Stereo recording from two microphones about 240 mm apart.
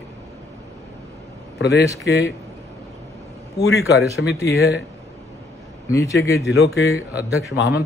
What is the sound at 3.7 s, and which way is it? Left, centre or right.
Speech, left.